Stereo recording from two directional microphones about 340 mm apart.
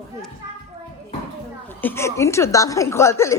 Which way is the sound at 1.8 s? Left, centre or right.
Centre.